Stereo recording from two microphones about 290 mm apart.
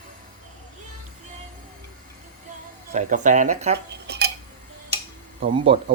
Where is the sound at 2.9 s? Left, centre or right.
Right.